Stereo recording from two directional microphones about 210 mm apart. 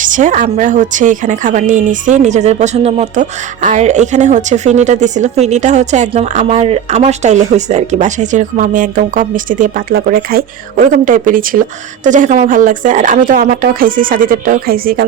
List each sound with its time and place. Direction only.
0.0 s a woman's voice: 35° right (ahead or behind)